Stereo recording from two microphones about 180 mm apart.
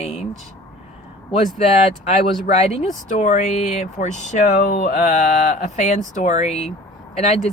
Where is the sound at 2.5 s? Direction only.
35° left (ahead or behind).